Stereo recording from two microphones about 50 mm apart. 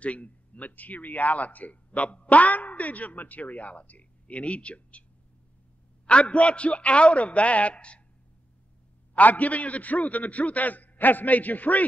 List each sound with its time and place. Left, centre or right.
0.0 s speech: left
6.0 s a man's voice: left
9.1 s speech: left